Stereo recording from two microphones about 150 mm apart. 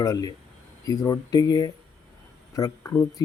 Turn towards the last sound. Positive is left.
turn(degrees=15)  # may be behind; listen again after turning